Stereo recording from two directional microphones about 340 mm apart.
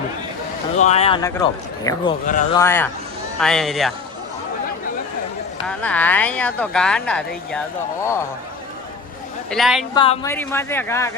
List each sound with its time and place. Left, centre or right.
0.8 s speech: centre
2.2 s speech: left
2.6 s speech: centre
5.6 s speech: centre
9.5 s speech: centre
9.9 s speech: centre